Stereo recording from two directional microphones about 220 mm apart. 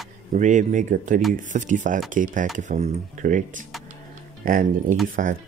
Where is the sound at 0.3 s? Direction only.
35° right (ahead or behind).